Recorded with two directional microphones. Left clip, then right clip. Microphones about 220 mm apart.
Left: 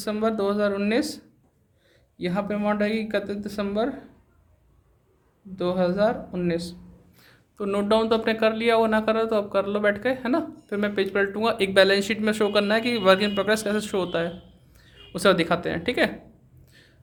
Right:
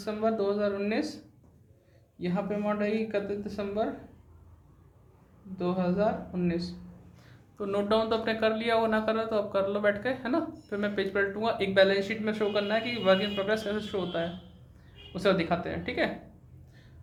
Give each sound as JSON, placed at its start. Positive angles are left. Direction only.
{"t": 0.0, "sound": "speech", "side_deg": 50}
{"t": 5.5, "sound": "speech", "side_deg": 50}
{"t": 7.2, "sound": "speech", "side_deg": 35}